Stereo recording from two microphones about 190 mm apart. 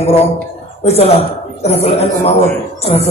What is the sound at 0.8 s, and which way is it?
A woman's voice, 35° left (ahead or behind).